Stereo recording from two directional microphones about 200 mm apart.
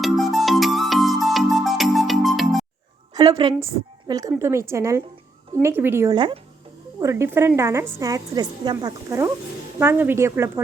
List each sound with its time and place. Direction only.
0.0 s music: centre (ahead or behind)
3.1 s a sound: 20° right (ahead or behind)
3.6 s a woman's voice: 15° right (ahead or behind)
6.1 s speech: 25° right (ahead or behind)
7.0 s a woman's voice: 15° right (ahead or behind)